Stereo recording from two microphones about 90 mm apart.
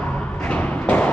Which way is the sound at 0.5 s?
15° left (ahead or behind).